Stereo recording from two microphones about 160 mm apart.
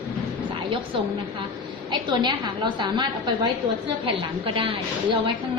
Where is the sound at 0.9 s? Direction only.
35° right (ahead or behind).